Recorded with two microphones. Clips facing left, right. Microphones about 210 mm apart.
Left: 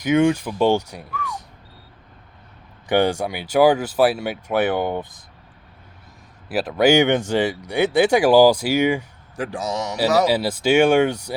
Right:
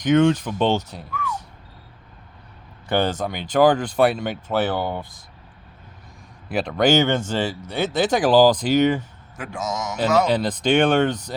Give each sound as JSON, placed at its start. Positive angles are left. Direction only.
{"t": 0.0, "sound": "speech", "side_deg": 10}
{"t": 2.8, "sound": "speech", "side_deg": 15}
{"t": 6.5, "sound": "speech", "side_deg": 5}
{"t": 9.4, "sound": "a man's voice", "side_deg": 35}
{"t": 10.2, "sound": "speech", "side_deg": 10}